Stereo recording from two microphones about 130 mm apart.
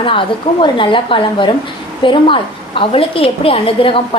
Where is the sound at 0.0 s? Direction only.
40° left (ahead or behind).